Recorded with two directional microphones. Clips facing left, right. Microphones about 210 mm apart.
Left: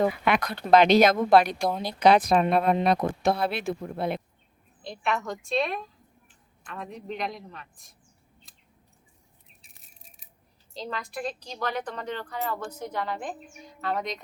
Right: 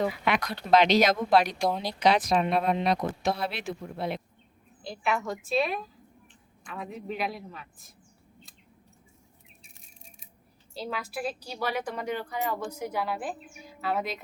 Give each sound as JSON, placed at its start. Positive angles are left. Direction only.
{"t": 0.0, "sound": "speech", "side_deg": 55}
{"t": 4.8, "sound": "a man's voice", "side_deg": 0}
{"t": 9.6, "sound": "a sound", "side_deg": 0}
{"t": 10.8, "sound": "a woman's voice", "side_deg": -5}